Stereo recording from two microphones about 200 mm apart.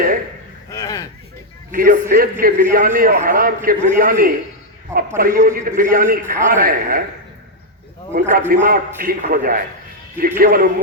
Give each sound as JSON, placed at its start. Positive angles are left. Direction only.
{"t": 0.7, "sound": "a sound", "side_deg": 15}
{"t": 1.7, "sound": "a man's voice", "side_deg": -45}
{"t": 8.3, "sound": "a man's voice", "side_deg": -45}